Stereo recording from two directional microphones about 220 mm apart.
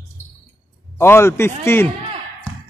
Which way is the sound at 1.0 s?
10° left (ahead or behind).